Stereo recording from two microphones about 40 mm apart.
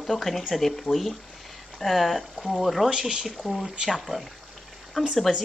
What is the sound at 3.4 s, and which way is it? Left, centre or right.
Speech, centre.